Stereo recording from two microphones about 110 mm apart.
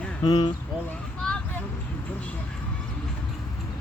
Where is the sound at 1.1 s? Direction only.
10° left (ahead or behind).